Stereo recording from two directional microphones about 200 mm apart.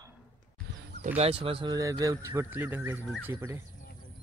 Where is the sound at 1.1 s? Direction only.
30° right (ahead or behind); by 3.6 s 10° right (ahead or behind).